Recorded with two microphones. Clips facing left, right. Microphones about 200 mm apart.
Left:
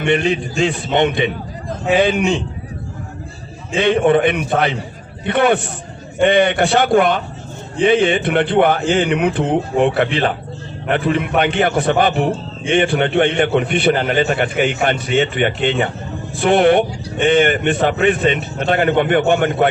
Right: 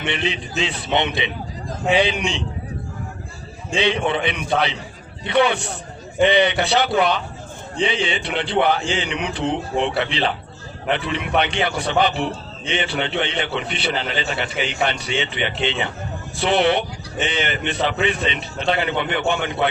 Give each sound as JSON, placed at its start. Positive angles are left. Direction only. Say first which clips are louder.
{"t": 0.0, "sound": "a man's voice", "louder": "left 8 dB", "side_deg": 45}
{"t": 3.8, "sound": "a man's voice", "louder": "left 7 dB", "side_deg": 50}